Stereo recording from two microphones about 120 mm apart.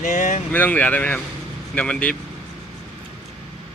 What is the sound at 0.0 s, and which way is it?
Vehicle, 90° left.